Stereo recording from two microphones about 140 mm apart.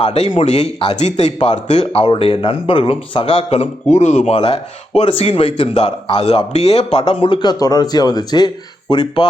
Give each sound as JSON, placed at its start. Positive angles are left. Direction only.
{"t": 0.0, "sound": "speech", "side_deg": 45}
{"t": 3.8, "sound": "speech", "side_deg": 55}
{"t": 7.1, "sound": "speech", "side_deg": 40}